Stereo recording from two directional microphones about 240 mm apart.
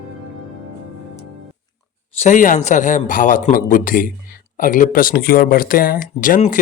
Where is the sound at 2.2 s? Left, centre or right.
Left.